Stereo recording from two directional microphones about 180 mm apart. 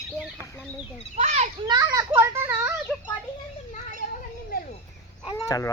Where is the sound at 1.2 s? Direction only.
40° right (ahead or behind).